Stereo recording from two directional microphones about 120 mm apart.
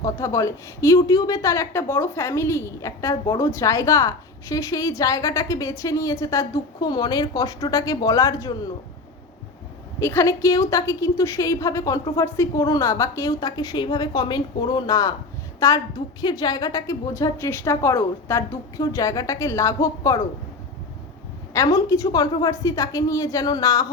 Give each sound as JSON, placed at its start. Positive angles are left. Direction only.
{"t": 0.0, "sound": "speech", "side_deg": 25}
{"t": 10.0, "sound": "a woman's voice", "side_deg": 20}
{"t": 21.5, "sound": "speech", "side_deg": 30}